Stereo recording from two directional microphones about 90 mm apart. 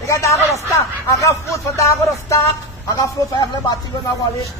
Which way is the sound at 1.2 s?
35° left (ahead or behind).